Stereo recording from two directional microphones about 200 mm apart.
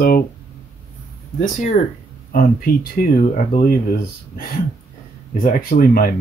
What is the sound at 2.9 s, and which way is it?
Speech, 45° left (ahead or behind).